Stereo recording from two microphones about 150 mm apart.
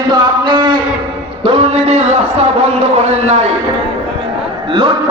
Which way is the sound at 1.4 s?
40° right (ahead or behind).